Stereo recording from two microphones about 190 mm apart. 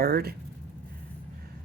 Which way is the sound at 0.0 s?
55° right (ahead or behind).